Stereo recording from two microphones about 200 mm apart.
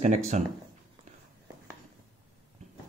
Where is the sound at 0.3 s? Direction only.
35° right (ahead or behind).